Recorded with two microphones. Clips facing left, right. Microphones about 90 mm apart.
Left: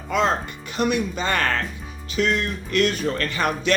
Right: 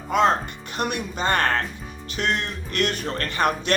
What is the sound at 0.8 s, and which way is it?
Speech, 55° right (ahead or behind).